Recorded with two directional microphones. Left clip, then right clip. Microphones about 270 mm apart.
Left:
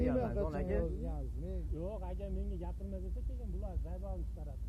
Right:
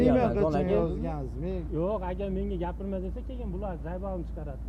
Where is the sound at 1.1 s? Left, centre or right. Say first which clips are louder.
Right 12 dB; right.